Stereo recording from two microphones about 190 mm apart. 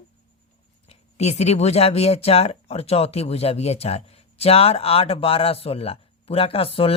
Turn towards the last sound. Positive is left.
turn(degrees=30)  # may be behind; listen again after turning